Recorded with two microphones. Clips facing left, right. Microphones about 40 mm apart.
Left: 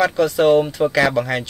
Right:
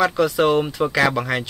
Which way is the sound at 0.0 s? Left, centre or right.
Centre.